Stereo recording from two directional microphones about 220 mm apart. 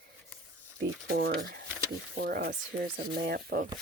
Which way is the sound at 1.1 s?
40° right (ahead or behind).